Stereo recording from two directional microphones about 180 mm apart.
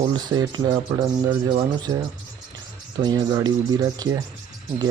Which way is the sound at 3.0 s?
25° right (ahead or behind).